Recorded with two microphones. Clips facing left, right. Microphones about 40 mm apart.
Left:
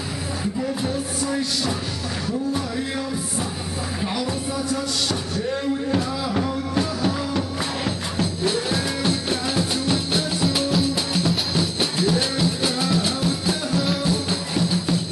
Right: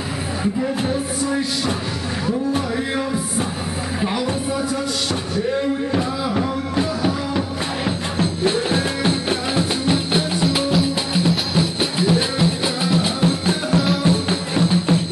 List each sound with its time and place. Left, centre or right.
0.4 s music: right
6.3 s music: centre
8.2 s music: right